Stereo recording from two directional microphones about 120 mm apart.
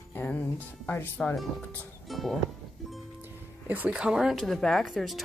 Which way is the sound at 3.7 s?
10° right (ahead or behind).